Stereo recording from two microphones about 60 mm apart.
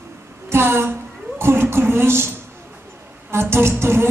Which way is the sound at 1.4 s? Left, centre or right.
Right.